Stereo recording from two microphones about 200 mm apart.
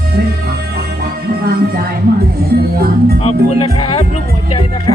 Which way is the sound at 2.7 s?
50° right (ahead or behind).